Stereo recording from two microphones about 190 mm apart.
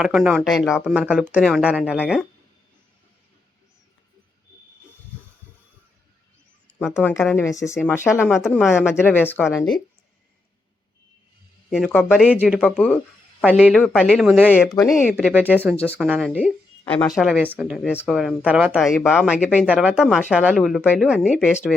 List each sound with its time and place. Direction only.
0.0 s speech: 5° right (ahead or behind)
6.7 s speech: 5° left (ahead or behind)
8.3 s speech: centre (ahead or behind)
9.0 s speech: 10° left (ahead or behind)
11.7 s speech: centre (ahead or behind)
12.6 s speech: 5° left (ahead or behind)
16.8 s speech: 5° left (ahead or behind)